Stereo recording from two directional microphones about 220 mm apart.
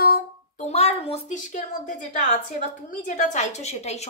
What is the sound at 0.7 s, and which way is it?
A woman's voice, 30° left (ahead or behind).